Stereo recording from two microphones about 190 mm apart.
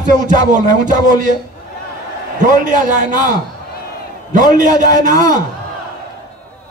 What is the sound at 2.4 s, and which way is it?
A man's voice, 45° right (ahead or behind).